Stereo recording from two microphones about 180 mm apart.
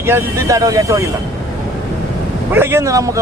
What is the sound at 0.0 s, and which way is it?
Speech, 15° right (ahead or behind).